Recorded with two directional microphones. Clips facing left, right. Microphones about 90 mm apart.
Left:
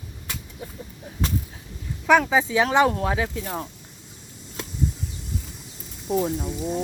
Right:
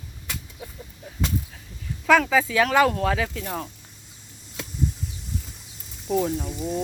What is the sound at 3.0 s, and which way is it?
Speech, 10° left (ahead or behind).